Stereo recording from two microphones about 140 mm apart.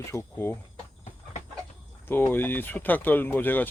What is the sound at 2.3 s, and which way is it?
Speech, 15° left (ahead or behind).